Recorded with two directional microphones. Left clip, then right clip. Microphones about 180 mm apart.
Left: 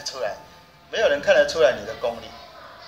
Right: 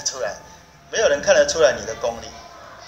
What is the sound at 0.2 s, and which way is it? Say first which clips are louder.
Music: left 1 dB; 20° right (ahead or behind).